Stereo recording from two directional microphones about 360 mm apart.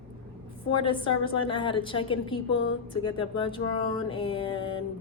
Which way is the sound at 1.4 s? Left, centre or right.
Centre.